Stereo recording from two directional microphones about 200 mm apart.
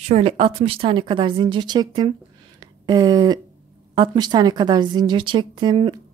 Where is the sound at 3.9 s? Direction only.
20° right (ahead or behind).